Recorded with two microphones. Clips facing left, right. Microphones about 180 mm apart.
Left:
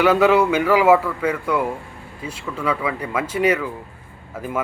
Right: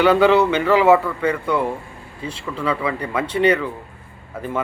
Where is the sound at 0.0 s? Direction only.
5° left (ahead or behind).